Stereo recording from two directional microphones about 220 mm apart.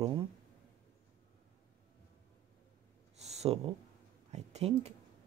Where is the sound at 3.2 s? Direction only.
30° right (ahead or behind).